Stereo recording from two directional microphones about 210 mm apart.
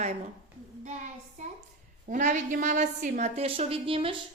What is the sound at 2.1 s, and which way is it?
A woman's voice, 35° right (ahead or behind).